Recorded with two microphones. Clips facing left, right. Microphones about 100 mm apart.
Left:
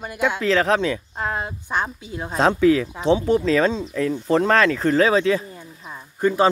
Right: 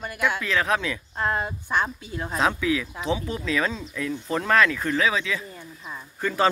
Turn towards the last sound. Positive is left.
turn(degrees=25)  # may be behind; listen again after turning